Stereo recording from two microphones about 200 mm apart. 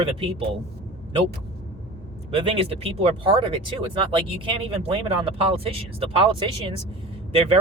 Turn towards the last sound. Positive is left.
turn(degrees=-30)  # may be behind; listen again after turning